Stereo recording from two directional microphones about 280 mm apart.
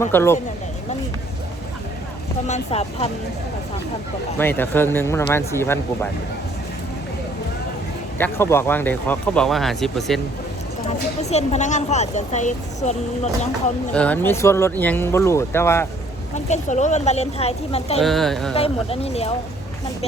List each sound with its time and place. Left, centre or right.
0.0 s speech: centre
2.5 s speech: left
4.4 s speech: centre
8.2 s speech: centre
10.8 s speech: left
13.9 s speech: centre
16.3 s speech: left
18.0 s speech: centre
18.5 s speech: left